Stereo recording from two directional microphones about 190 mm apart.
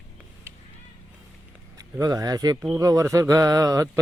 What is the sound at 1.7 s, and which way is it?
Speech, 20° right (ahead or behind).